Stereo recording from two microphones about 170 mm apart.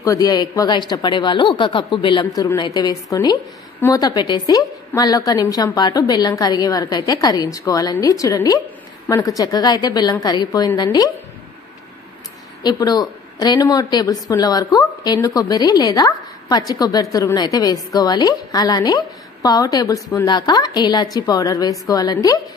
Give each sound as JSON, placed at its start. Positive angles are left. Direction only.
{"t": 0.0, "sound": "a woman's voice", "side_deg": 20}
{"t": 12.6, "sound": "a woman's voice", "side_deg": 25}